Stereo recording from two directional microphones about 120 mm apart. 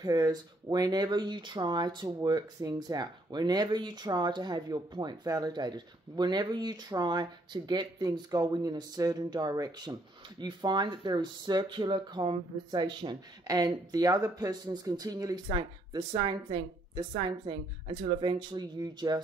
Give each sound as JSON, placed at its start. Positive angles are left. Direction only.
{"t": 0.0, "sound": "speech", "side_deg": -30}
{"t": 17.5, "sound": "speech", "side_deg": -40}